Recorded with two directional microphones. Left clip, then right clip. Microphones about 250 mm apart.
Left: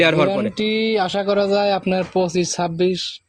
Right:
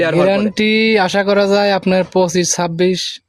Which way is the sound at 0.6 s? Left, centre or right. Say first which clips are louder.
Right 6 dB; right.